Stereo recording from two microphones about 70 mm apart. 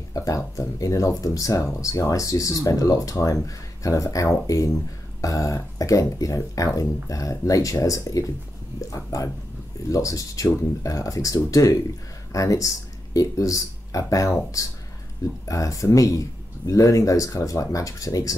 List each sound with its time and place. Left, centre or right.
0.1 s speech: left